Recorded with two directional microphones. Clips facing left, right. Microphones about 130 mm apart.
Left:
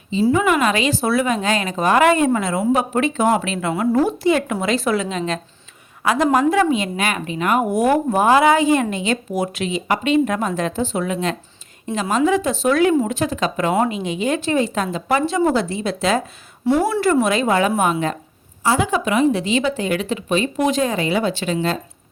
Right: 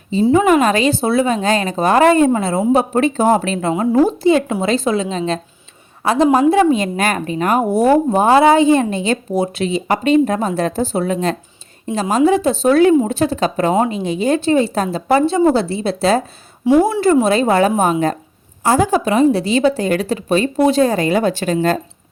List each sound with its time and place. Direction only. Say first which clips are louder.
0.3 s a woman's voice: right 5 dB; 35° right (ahead or behind)
16.6 s speech: right 5 dB; 15° right (ahead or behind)
17.2 s a woman's voice: right 4 dB; 35° right (ahead or behind)